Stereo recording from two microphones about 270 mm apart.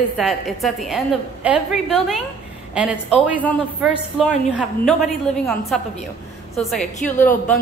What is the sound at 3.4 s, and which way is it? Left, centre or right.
A woman's voice, centre.